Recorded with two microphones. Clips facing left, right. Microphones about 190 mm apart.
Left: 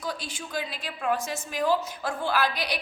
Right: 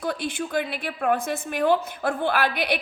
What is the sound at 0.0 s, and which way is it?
A woman's voice, 60° right (ahead or behind).